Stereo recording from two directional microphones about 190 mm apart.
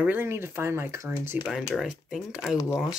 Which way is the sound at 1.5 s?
Centre (ahead or behind).